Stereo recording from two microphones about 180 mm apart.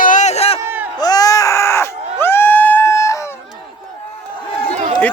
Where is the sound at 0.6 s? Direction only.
10° right (ahead or behind).